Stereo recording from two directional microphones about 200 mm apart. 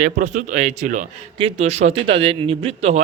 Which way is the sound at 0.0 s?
40° right (ahead or behind).